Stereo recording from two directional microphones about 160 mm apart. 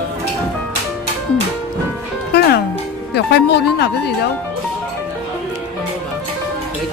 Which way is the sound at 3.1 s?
90° left.